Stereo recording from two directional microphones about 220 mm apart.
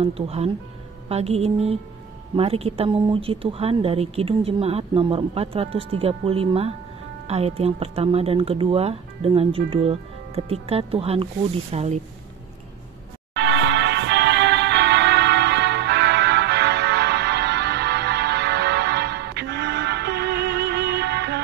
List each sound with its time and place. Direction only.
0.0 s speech: 25° right (ahead or behind)
13.3 s music: 50° right (ahead or behind)